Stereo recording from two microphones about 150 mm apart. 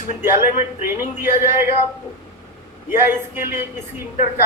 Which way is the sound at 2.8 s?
15° right (ahead or behind).